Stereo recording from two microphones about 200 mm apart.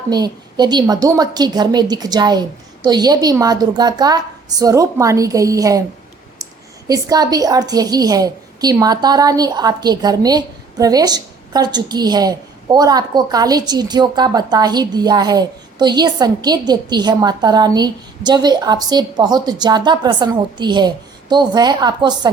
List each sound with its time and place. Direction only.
0.1 s a woman's voice: 20° right (ahead or behind)
6.8 s a woman's voice: 20° right (ahead or behind)